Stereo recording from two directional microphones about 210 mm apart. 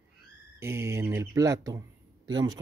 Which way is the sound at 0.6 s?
10° right (ahead or behind).